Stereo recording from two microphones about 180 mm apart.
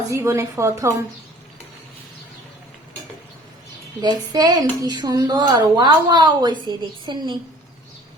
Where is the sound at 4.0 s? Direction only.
20° right (ahead or behind).